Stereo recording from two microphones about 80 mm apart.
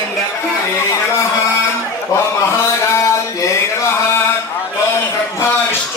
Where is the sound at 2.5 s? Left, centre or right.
Left.